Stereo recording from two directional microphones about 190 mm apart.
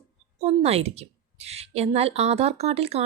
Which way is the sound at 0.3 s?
30° right (ahead or behind).